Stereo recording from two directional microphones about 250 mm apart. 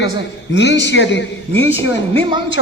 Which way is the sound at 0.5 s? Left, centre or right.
Left.